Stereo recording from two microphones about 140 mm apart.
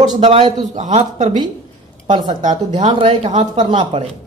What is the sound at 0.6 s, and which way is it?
Speech, 60° right (ahead or behind).